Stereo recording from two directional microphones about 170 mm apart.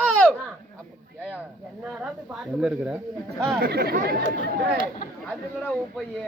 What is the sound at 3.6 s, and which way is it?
Speech, 65° right (ahead or behind).